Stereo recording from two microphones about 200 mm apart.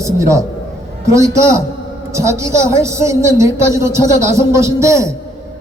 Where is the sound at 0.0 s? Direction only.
15° right (ahead or behind).